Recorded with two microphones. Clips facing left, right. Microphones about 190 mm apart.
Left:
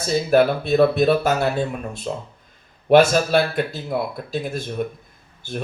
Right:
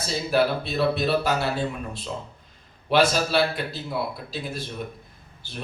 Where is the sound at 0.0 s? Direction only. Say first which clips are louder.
Left 6 dB; 50° left (ahead or behind).